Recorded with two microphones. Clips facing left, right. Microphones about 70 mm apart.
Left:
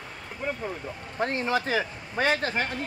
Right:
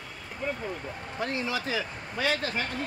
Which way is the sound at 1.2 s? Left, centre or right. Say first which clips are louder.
Left 5 dB; left.